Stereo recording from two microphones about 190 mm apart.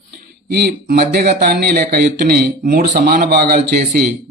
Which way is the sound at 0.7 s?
55° right (ahead or behind).